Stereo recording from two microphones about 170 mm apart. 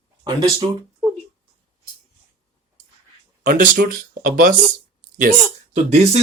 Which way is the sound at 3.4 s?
55° right (ahead or behind).